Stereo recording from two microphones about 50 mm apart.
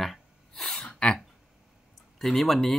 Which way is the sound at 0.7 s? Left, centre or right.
Centre.